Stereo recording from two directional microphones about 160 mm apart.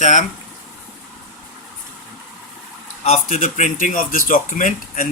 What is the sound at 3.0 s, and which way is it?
Speech, 45° left (ahead or behind).